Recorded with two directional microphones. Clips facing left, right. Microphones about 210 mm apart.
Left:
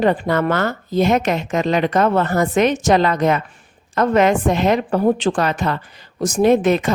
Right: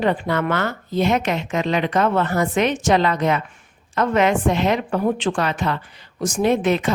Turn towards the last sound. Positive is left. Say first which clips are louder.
# left 4 dB
turn(degrees=45)  # may be behind; listen again after turning